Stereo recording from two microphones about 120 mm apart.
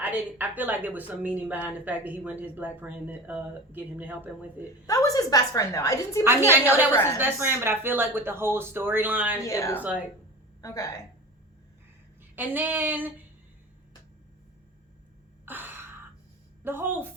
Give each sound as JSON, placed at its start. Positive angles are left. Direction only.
{"t": 0.0, "sound": "speech", "side_deg": -15}
{"t": 4.9, "sound": "a woman's voice", "side_deg": 30}
{"t": 6.5, "sound": "speech", "side_deg": -15}
{"t": 6.9, "sound": "a woman's voice", "side_deg": 15}
{"t": 7.2, "sound": "speech", "side_deg": -20}
{"t": 9.4, "sound": "a woman's voice", "side_deg": 25}
{"t": 12.4, "sound": "speech", "side_deg": -15}
{"t": 15.4, "sound": "gasp", "side_deg": -15}
{"t": 16.6, "sound": "speech", "side_deg": -20}